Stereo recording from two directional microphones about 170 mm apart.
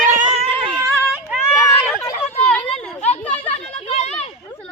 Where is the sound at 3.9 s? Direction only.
40° left (ahead or behind).